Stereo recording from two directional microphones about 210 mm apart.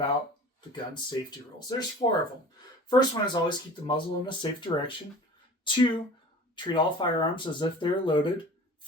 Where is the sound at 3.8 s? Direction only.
25° left (ahead or behind).